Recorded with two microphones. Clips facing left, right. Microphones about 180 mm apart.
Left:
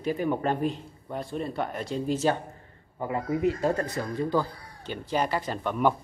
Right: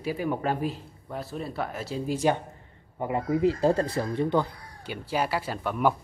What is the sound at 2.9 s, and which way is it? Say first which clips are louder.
Speech: right 2 dB; 25° right (ahead or behind).